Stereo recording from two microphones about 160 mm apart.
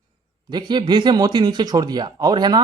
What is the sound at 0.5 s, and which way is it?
A man's voice, 25° right (ahead or behind).